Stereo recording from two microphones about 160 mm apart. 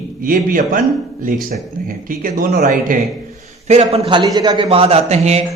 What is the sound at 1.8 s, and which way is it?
A man's voice, 60° right (ahead or behind).